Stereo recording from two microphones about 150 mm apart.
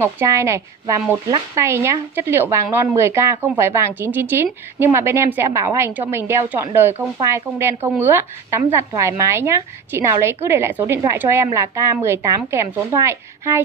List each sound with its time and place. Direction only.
0.0 s a woman's voice: 20° right (ahead or behind)